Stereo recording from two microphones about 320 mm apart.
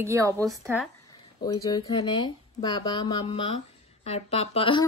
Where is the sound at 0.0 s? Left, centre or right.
Centre.